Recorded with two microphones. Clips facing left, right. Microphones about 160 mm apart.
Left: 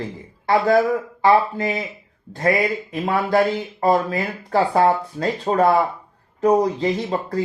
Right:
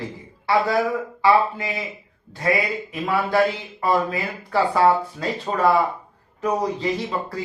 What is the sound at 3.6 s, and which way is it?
Speech, 40° left (ahead or behind).